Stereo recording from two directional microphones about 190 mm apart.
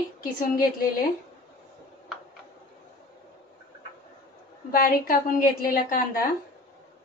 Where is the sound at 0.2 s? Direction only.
45° left (ahead or behind).